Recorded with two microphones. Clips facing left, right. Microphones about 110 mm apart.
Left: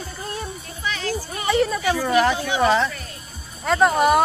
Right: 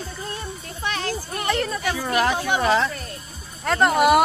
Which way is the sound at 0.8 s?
50° right (ahead or behind).